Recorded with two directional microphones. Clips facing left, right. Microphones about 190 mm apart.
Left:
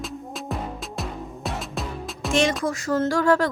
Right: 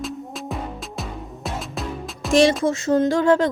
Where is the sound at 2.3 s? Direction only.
35° right (ahead or behind).